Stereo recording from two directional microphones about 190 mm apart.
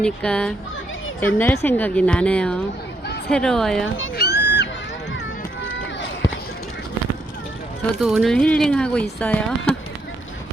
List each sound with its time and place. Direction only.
0.0 s a woman's voice: 5° left (ahead or behind)
3.9 s a sound: 75° left (ahead or behind)
5.7 s run: 75° left (ahead or behind)
7.9 s speech: centre (ahead or behind)